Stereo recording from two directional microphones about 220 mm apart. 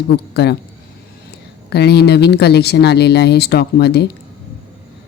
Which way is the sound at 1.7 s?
50° left (ahead or behind).